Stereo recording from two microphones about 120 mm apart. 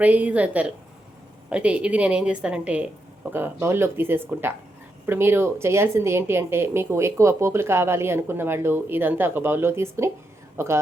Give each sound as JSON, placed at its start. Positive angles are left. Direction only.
{"t": 0.0, "sound": "a woman's voice", "side_deg": -15}